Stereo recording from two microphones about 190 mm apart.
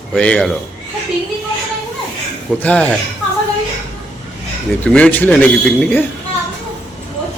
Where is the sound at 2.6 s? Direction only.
5° left (ahead or behind).